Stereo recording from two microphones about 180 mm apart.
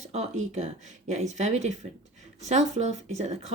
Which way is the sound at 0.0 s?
40° right (ahead or behind).